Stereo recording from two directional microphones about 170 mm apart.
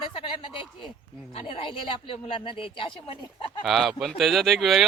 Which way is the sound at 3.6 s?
Centre (ahead or behind).